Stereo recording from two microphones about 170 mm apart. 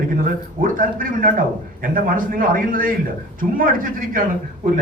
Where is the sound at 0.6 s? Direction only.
55° right (ahead or behind).